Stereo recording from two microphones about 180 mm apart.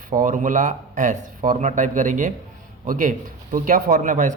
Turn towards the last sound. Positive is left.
turn(degrees=-45)  # may be behind; listen again after turning